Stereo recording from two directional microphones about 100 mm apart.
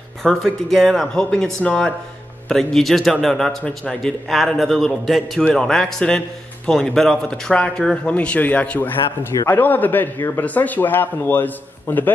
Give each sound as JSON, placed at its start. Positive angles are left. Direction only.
{"t": 0.2, "sound": "a man's voice", "side_deg": 0}